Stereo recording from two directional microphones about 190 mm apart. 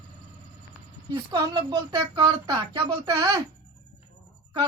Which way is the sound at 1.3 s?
20° right (ahead or behind).